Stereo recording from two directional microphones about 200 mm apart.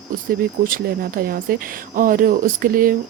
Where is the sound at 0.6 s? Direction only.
45° right (ahead or behind).